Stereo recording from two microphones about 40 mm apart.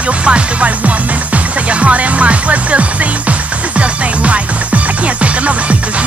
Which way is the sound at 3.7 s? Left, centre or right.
Right.